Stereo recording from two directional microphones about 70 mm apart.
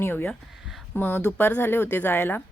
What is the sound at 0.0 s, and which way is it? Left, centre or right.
A woman's voice, left.